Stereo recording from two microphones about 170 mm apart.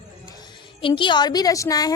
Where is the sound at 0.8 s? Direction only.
30° left (ahead or behind).